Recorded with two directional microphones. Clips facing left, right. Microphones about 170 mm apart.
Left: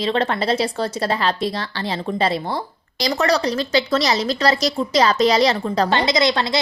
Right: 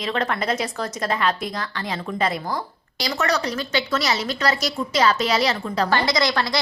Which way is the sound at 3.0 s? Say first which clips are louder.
Left 5 dB; 35° left (ahead or behind).